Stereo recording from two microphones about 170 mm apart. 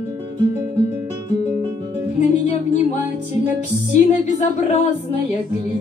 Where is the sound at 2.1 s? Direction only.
45° left (ahead or behind).